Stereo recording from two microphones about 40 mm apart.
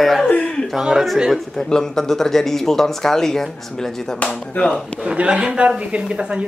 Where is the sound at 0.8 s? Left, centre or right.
Centre.